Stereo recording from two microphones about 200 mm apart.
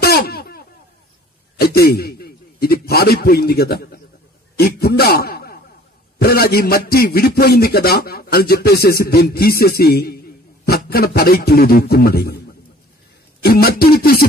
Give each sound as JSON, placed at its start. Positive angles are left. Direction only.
{"t": 0.0, "sound": "a sound", "side_deg": 50}
{"t": 1.6, "sound": "a man's voice", "side_deg": 50}
{"t": 13.4, "sound": "a man's voice", "side_deg": 50}